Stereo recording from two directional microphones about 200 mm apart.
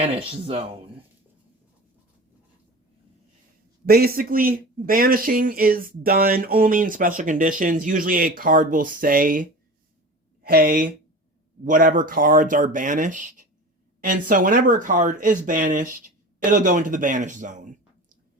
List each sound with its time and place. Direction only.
0.0 s speech: 30° right (ahead or behind)
3.8 s a man's voice: 50° right (ahead or behind)